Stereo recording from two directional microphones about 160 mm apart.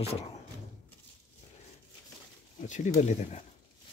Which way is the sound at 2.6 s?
50° left (ahead or behind).